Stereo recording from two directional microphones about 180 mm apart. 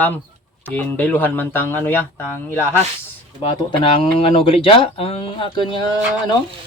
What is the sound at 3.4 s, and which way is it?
Speech, 30° left (ahead or behind).